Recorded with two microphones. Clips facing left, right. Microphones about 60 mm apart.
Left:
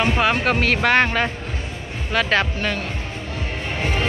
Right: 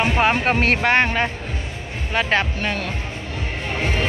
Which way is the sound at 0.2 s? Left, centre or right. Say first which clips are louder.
Right 1 dB; right.